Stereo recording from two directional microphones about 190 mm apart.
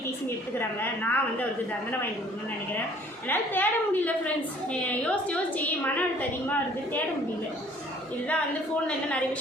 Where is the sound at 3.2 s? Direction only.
10° left (ahead or behind).